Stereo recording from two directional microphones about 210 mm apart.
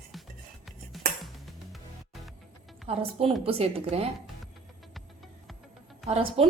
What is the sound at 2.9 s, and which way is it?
A woman's voice, 30° right (ahead or behind).